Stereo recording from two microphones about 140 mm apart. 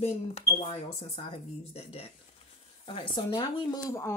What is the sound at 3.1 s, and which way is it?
Speech, 35° left (ahead or behind).